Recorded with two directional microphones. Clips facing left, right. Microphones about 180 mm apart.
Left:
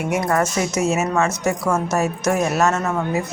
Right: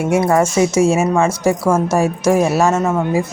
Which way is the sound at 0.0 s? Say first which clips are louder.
Right 6 dB; 25° right (ahead or behind).